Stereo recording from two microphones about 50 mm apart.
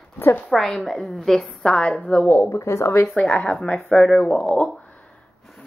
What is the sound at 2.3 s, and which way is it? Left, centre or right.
Speech, left.